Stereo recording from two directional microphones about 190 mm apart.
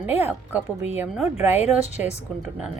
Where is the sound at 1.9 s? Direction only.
35° left (ahead or behind).